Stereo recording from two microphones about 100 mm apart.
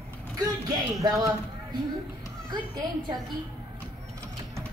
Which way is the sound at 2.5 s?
45° right (ahead or behind).